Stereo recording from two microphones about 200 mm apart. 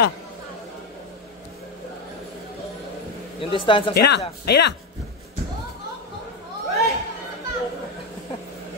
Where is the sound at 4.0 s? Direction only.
55° left (ahead or behind).